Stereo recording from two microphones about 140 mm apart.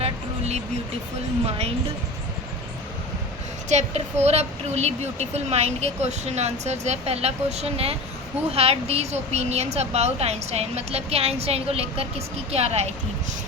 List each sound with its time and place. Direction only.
0.0 s a sound: 50° right (ahead or behind)
1.5 s a woman's voice: 45° right (ahead or behind)
3.7 s a woman's voice: 55° right (ahead or behind)